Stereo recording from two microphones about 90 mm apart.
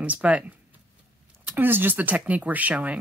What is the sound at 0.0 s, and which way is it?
A woman's voice, 15° right (ahead or behind).